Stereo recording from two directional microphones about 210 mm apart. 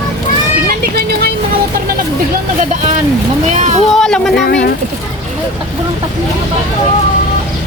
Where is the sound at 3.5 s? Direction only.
35° right (ahead or behind).